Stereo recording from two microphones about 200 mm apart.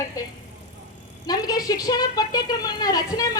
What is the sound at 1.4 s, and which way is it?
A woman's voice, 20° left (ahead or behind).